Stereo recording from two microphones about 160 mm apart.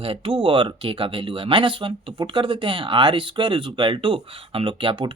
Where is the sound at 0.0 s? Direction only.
35° right (ahead or behind).